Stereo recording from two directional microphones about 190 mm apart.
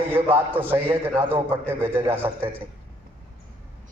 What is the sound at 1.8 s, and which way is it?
Speech, 10° right (ahead or behind).